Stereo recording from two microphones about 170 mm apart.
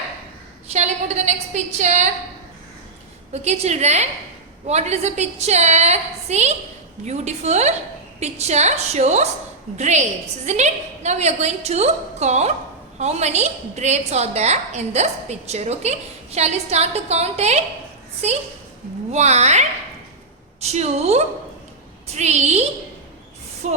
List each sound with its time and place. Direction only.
0.7 s a sound: 40° right (ahead or behind)
3.3 s a woman's voice: 40° right (ahead or behind)
19.1 s a woman's voice: 40° right (ahead or behind)
23.6 s speech: 45° right (ahead or behind)